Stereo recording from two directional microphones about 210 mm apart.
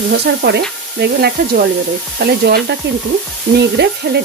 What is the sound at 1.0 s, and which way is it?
Frying, 50° right (ahead or behind).